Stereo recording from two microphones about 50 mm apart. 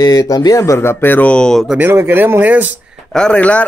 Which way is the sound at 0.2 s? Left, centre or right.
Left.